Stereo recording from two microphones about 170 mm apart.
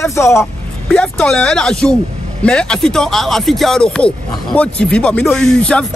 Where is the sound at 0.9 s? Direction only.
5° left (ahead or behind).